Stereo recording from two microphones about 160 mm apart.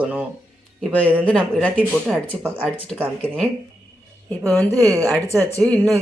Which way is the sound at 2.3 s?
10° right (ahead or behind).